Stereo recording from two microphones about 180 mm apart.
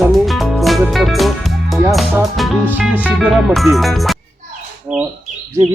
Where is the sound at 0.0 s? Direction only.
Centre (ahead or behind).